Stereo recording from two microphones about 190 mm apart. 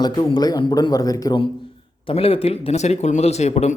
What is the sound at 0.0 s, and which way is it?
Speech, 20° left (ahead or behind).